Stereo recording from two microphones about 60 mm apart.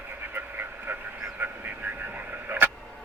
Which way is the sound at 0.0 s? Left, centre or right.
Right.